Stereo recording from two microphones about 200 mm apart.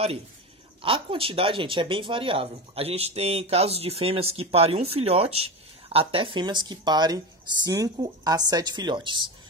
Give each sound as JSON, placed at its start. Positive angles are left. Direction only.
{"t": 0.8, "sound": "speech", "side_deg": -25}